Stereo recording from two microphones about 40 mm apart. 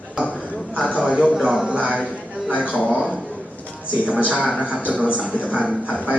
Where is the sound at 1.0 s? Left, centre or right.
Right.